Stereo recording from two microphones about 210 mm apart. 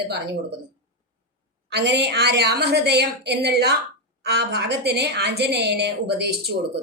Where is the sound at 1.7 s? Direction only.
55° right (ahead or behind).